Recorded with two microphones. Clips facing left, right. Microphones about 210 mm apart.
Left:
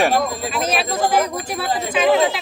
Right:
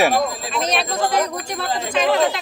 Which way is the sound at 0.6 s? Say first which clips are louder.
Even; 5° left (ahead or behind).